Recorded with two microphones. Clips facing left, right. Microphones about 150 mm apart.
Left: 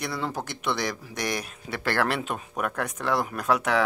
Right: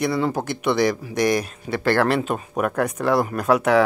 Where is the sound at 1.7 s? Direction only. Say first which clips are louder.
Right 8 dB; centre (ahead or behind).